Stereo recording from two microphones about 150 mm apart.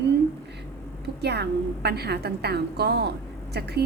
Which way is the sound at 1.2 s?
90° right.